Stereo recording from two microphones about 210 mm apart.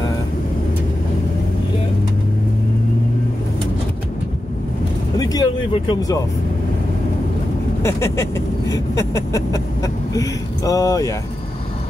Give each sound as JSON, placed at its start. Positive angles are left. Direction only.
{"t": 5.1, "sound": "vehicle", "side_deg": 20}
{"t": 7.8, "sound": "speech", "side_deg": 10}